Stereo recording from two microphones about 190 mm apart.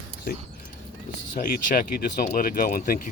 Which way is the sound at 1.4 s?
45° left (ahead or behind).